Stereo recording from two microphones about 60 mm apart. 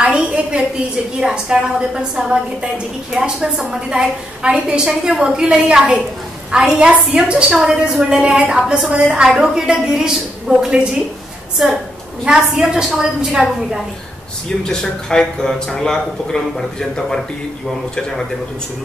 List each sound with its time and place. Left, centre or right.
0.0 s a sound: centre
1.2 s a woman's voice: centre
14.6 s a man's voice: centre